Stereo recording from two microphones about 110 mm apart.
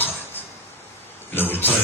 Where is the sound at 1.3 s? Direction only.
20° left (ahead or behind).